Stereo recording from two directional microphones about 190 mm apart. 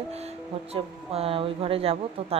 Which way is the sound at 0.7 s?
30° right (ahead or behind).